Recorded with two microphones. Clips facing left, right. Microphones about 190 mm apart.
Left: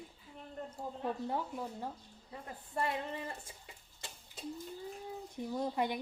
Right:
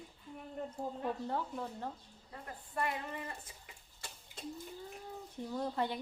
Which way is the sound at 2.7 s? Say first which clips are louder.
Left 2 dB; 25° left (ahead or behind).